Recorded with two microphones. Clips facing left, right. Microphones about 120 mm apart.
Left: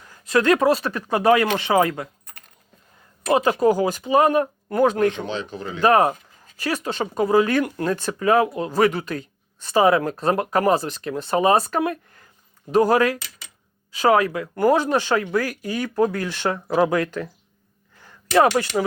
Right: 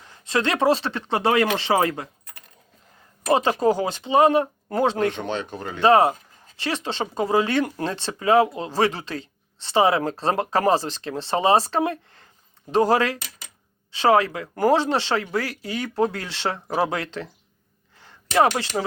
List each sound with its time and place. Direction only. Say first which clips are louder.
0.1 s speech: left 5 dB; 25° right (ahead or behind)
3.3 s speech: left 2 dB; 30° right (ahead or behind)
5.2 s speech: even; 50° right (ahead or behind)
5.8 s speech: right 1 dB; 25° right (ahead or behind)